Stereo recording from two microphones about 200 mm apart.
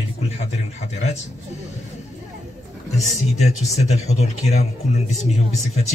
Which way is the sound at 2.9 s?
35° left (ahead or behind).